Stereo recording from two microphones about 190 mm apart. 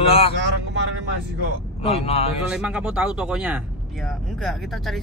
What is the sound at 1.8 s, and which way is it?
Speech, 30° left (ahead or behind).